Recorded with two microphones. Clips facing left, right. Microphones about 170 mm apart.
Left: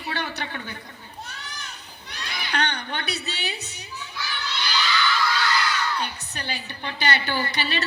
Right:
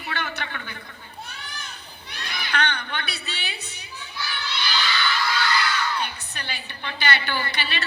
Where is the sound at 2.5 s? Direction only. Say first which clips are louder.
Right 1 dB; 40° left (ahead or behind).